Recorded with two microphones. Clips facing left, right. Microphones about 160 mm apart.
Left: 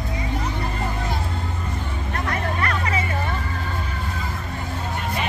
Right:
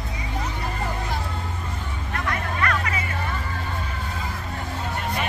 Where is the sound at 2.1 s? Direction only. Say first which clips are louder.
Left 2 dB; 30° left (ahead or behind).